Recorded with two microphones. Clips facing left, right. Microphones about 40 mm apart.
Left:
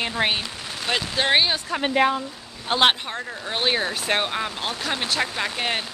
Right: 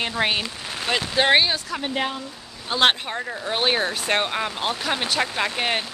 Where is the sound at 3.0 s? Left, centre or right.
Centre.